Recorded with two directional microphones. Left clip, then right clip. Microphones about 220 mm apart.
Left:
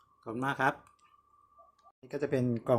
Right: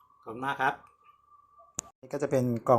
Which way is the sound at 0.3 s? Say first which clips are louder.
Right 1 dB; 35° left (ahead or behind).